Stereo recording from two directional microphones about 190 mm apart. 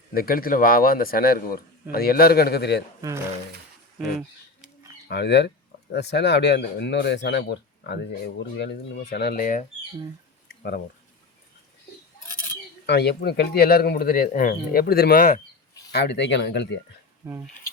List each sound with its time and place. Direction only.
0.1 s a man's voice: 50° left (ahead or behind)
3.9 s a sound: 5° right (ahead or behind)
5.0 s speech: 65° left (ahead or behind); by 9.6 s 45° left (ahead or behind)
12.8 s speech: 60° left (ahead or behind)
15.9 s speech: 60° left (ahead or behind)
17.2 s speech: 10° right (ahead or behind)